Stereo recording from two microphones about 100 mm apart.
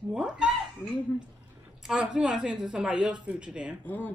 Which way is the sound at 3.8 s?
15° left (ahead or behind).